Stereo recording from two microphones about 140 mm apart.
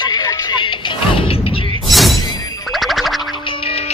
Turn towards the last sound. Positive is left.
turn(degrees=40)  # may be behind; listen again after turning